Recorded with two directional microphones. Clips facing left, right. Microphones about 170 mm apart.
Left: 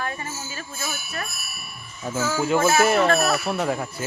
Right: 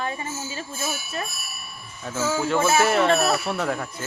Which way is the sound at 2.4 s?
10° left (ahead or behind).